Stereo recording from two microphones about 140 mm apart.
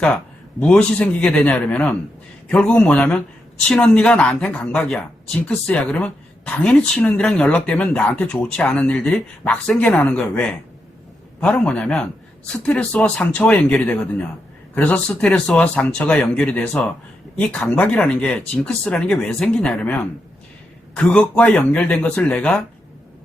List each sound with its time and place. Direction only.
0.7 s speech: 10° left (ahead or behind)
11.3 s speech: 5° left (ahead or behind)